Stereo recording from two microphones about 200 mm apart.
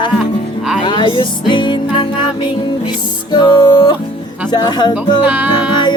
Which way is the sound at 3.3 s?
20° left (ahead or behind).